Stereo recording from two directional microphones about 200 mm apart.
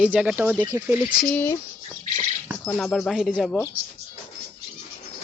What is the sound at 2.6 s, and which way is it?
Speech, centre (ahead or behind).